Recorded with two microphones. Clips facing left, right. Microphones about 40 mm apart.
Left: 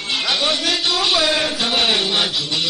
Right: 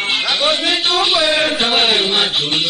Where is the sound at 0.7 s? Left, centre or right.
Centre.